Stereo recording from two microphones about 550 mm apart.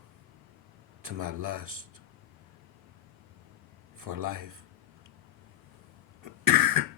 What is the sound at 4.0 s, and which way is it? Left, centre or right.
Speech, right.